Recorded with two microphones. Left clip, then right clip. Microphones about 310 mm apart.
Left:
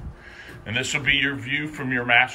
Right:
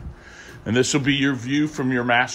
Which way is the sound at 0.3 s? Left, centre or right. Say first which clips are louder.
Right 3 dB; centre.